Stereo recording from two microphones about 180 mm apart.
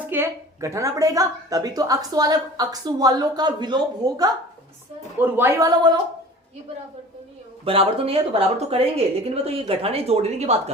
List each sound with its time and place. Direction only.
0.1 s a woman's voice: 15° right (ahead or behind)
5.2 s a woman's voice: 15° right (ahead or behind)
7.6 s speech: 30° right (ahead or behind)